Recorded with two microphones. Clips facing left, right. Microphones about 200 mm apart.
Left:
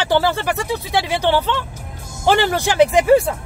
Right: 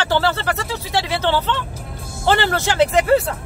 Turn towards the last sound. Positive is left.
turn(degrees=15)  # may be behind; listen again after turning